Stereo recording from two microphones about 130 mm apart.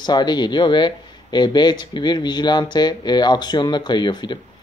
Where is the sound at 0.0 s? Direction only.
35° left (ahead or behind).